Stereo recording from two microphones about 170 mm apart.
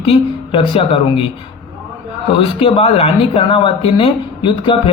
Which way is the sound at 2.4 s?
35° left (ahead or behind).